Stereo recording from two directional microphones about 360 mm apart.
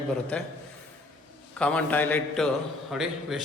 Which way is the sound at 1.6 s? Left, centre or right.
Centre.